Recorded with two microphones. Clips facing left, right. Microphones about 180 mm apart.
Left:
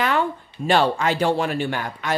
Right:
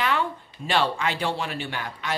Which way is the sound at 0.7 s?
45° left (ahead or behind).